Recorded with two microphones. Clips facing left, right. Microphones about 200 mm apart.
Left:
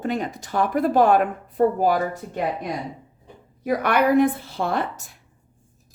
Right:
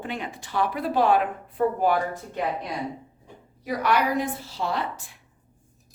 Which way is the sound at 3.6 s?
55° left (ahead or behind).